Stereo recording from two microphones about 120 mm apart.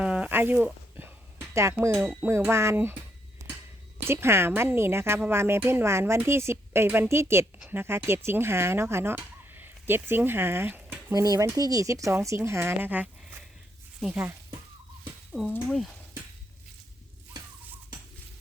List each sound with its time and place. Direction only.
0.0 s a sound: 10° right (ahead or behind)
2.2 s speech: 20° right (ahead or behind)
4.0 s speech: 20° right (ahead or behind)
11.1 s speech: 30° right (ahead or behind); by 16.0 s 5° left (ahead or behind)